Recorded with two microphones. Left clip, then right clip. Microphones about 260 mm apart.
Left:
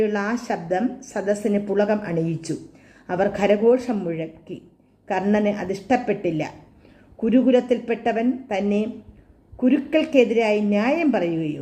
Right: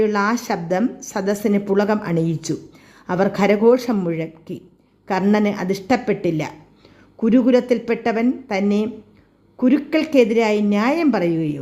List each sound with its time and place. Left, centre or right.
0.0 s a woman's voice: right